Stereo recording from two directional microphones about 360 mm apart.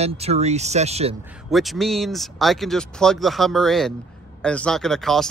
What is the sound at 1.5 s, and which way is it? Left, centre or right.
Speech, centre.